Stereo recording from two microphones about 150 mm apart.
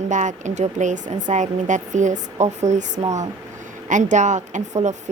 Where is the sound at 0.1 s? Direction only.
55° right (ahead or behind).